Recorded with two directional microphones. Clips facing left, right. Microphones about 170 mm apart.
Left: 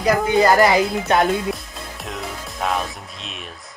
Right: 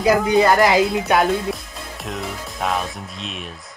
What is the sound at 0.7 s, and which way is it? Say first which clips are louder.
Speech: right 1 dB; 5° right (ahead or behind).